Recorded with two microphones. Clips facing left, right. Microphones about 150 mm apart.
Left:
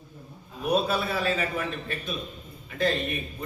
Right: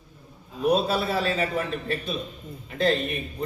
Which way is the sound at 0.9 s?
30° right (ahead or behind).